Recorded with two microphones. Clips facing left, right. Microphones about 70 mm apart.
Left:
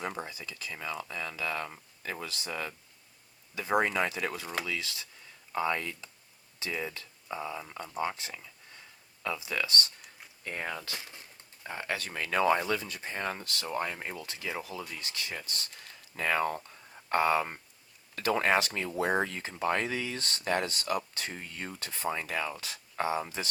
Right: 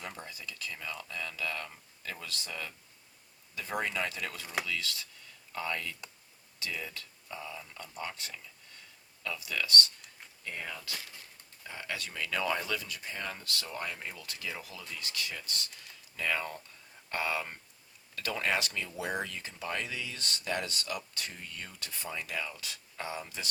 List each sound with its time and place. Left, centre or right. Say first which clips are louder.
0.0 s speech: left 7 dB; left
0.3 s speech: left 1 dB; centre
10.4 s speech: left 4 dB; left
10.9 s a sound: left 1 dB; left
11.7 s speech: left 4 dB; left